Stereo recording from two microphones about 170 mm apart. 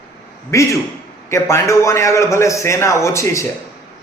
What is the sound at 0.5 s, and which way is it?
Speech, 15° left (ahead or behind).